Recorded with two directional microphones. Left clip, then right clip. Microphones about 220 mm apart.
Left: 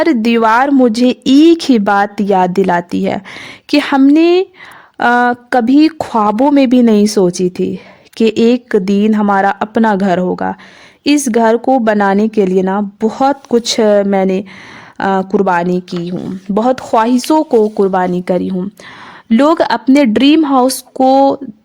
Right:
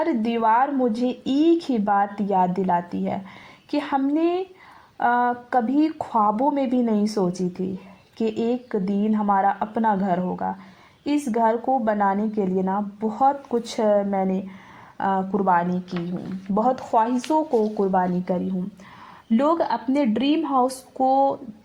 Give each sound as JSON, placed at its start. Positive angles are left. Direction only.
{"t": 0.0, "sound": "a woman's voice", "side_deg": 45}
{"t": 16.6, "sound": "a woman's voice", "side_deg": 40}
{"t": 17.9, "sound": "a woman's voice", "side_deg": 35}